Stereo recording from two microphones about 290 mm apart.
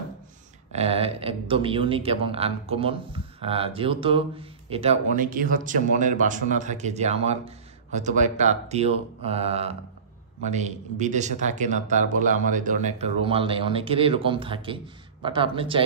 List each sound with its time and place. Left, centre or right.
0.7 s a man's voice: right